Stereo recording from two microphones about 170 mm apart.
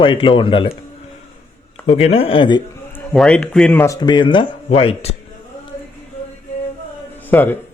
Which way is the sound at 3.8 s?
20° left (ahead or behind).